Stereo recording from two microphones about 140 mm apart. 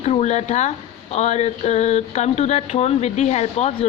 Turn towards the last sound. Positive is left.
turn(degrees=50)  # may be behind; listen again after turning